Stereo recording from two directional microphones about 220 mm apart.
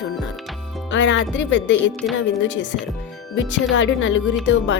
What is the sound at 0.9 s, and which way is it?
Speech, 55° left (ahead or behind).